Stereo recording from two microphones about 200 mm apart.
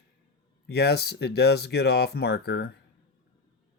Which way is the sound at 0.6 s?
55° left (ahead or behind).